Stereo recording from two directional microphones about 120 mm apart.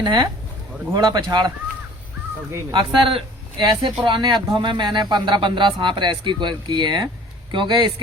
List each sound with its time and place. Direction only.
0.0 s speech: 40° right (ahead or behind)
2.7 s speech: 45° right (ahead or behind)